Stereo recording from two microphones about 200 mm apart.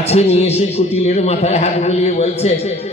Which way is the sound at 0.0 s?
30° left (ahead or behind).